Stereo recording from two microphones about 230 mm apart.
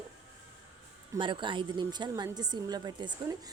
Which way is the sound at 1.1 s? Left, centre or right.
Right.